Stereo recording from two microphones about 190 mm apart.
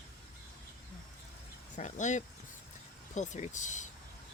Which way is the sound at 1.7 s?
40° left (ahead or behind).